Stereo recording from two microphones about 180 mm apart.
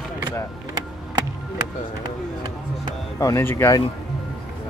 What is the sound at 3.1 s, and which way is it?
Speech, 15° left (ahead or behind).